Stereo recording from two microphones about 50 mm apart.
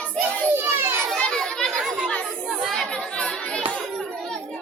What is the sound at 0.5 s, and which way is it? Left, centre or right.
Children playing, right.